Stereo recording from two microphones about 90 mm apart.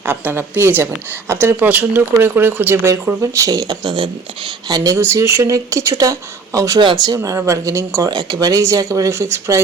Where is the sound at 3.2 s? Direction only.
35° right (ahead or behind).